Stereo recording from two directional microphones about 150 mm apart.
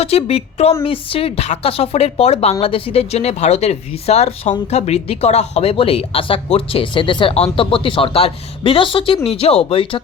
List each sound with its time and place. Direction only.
0.0 s speech: 45° left (ahead or behind)